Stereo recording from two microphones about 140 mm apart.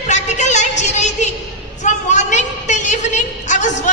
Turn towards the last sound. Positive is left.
turn(degrees=60)  # may be behind; listen again after turning